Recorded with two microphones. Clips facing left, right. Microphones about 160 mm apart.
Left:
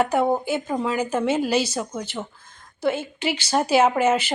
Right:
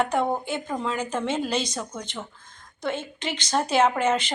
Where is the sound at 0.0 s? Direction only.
5° left (ahead or behind).